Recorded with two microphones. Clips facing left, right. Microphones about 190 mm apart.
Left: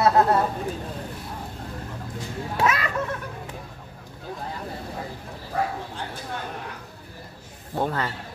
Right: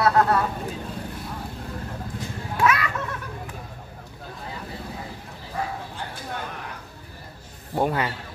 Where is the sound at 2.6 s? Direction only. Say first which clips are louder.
Right 2 dB; 25° left (ahead or behind).